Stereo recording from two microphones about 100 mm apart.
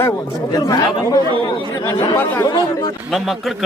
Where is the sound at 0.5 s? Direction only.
40° left (ahead or behind).